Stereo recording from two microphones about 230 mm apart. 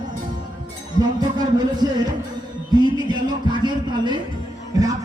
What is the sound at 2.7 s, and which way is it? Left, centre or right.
Music, centre.